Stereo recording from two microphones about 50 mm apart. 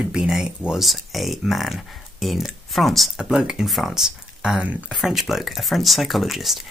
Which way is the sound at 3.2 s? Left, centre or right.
Centre.